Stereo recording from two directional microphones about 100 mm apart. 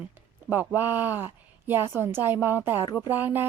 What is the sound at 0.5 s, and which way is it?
A woman's voice, 20° right (ahead or behind).